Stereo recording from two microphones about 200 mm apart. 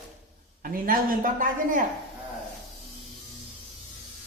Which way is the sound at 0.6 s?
45° right (ahead or behind).